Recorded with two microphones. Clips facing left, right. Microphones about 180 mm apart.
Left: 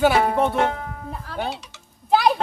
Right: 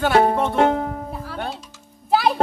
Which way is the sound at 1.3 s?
Centre (ahead or behind).